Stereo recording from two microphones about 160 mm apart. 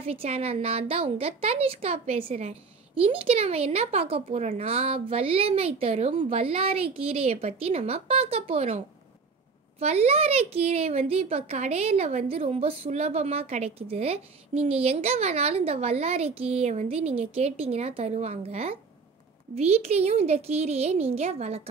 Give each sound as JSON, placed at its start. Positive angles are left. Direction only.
{"t": 0.0, "sound": "a woman's voice", "side_deg": -40}